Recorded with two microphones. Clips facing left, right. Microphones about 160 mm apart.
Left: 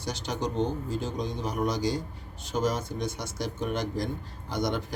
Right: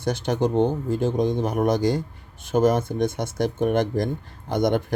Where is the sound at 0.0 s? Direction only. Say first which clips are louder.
Right 9 dB; 55° right (ahead or behind).